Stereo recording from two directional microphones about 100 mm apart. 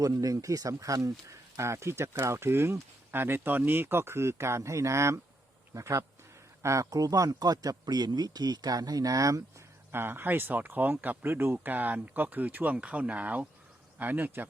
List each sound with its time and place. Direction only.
0.0 s speech: 35° right (ahead or behind)
9.9 s speech: 20° right (ahead or behind)